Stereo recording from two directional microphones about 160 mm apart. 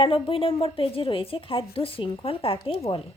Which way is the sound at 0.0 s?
35° left (ahead or behind).